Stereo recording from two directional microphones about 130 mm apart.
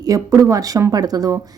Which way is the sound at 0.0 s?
25° right (ahead or behind).